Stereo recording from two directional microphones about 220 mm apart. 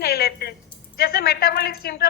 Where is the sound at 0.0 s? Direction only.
45° left (ahead or behind).